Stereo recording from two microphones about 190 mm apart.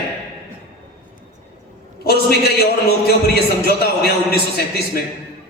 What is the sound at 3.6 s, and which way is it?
A man's voice, 55° left (ahead or behind).